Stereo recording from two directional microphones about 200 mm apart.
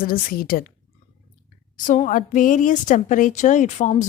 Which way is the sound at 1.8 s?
40° left (ahead or behind).